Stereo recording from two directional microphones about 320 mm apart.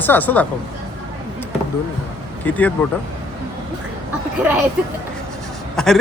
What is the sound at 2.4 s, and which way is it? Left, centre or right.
Speech, centre.